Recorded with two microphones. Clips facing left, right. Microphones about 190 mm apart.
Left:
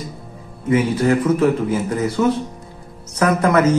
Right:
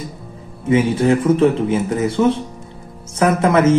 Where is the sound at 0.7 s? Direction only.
25° right (ahead or behind).